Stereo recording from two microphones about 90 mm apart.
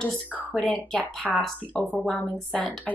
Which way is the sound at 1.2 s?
10° right (ahead or behind).